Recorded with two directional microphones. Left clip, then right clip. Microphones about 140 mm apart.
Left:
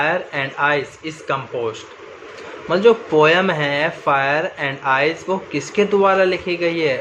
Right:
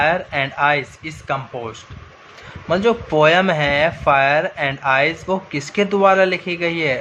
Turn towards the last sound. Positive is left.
turn(degrees=-35)  # may be behind; listen again after turning